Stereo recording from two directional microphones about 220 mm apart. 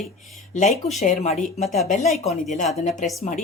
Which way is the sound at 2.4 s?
35° left (ahead or behind).